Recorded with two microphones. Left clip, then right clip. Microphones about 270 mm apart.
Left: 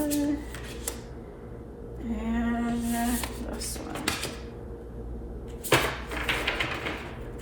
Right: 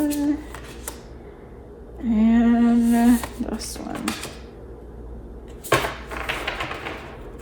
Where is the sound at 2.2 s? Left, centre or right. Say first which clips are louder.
Right 12 dB; right.